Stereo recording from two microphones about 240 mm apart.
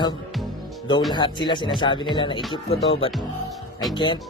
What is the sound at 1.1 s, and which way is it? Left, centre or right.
Speech, centre.